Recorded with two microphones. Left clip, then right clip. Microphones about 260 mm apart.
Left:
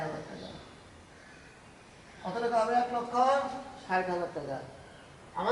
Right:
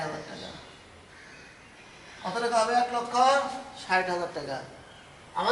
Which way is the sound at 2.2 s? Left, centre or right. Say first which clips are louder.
Right 3 dB; centre.